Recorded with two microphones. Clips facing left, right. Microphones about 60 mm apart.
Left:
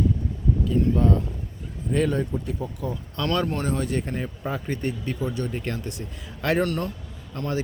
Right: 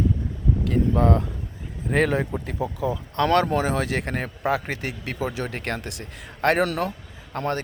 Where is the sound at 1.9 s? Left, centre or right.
Right.